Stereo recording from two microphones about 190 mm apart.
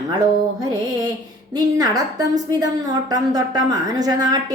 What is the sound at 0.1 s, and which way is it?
A woman's voice, 20° right (ahead or behind).